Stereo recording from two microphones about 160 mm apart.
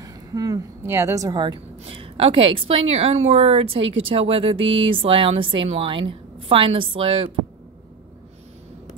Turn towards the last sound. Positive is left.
turn(degrees=-35)  # may be behind; listen again after turning